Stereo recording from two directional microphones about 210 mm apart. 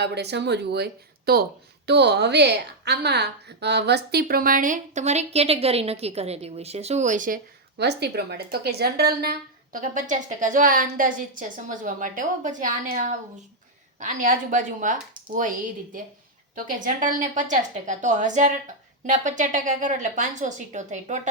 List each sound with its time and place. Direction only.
0.0 s a woman's voice: 50° right (ahead or behind)
7.8 s a woman's voice: 50° right (ahead or behind); by 21.2 s 35° right (ahead or behind)